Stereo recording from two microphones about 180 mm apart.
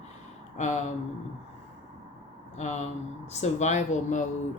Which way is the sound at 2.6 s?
40° left (ahead or behind).